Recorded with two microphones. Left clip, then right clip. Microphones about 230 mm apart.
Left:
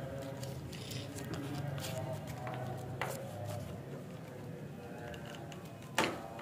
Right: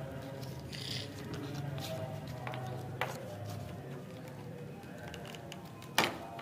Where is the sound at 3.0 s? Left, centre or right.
Right.